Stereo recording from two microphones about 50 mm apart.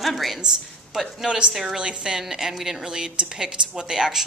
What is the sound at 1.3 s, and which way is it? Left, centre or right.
A woman's voice, right.